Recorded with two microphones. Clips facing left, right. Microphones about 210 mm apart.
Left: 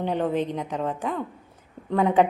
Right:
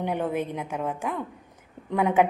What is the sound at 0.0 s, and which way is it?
A woman's voice, 10° right (ahead or behind).